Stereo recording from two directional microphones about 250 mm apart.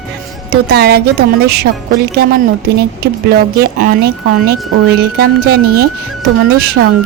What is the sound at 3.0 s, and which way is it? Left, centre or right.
Speech, right.